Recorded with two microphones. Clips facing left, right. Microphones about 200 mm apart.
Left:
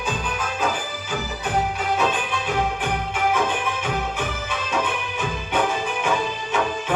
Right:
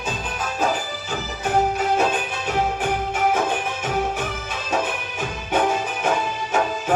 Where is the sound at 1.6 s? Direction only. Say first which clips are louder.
Right 3 dB; 45° right (ahead or behind).